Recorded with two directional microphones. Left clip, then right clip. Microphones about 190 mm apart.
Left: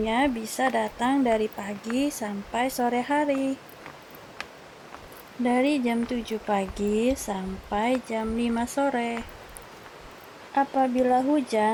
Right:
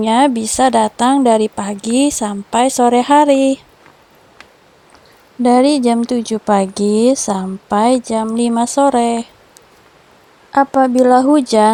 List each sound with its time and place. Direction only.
0.0 s a woman's voice: 70° left (ahead or behind); by 3.6 s 90° left
5.4 s speech: 90° left
10.5 s speech: 90° left